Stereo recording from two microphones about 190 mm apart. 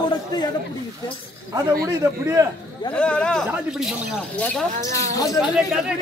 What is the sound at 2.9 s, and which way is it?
Speech, 5° left (ahead or behind).